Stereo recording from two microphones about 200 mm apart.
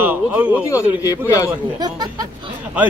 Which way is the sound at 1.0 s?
15° left (ahead or behind).